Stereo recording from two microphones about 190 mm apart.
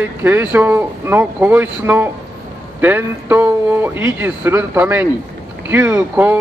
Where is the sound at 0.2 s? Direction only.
10° right (ahead or behind).